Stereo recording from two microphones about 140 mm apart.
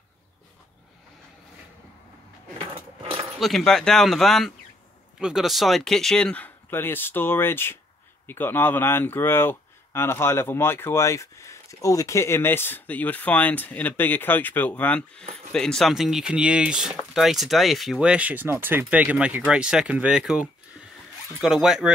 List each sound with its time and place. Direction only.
2.6 s keys jangling: 40° right (ahead or behind)
3.3 s a man's voice: centre (ahead or behind)